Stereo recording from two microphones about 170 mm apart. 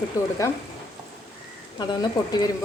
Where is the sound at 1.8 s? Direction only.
25° left (ahead or behind).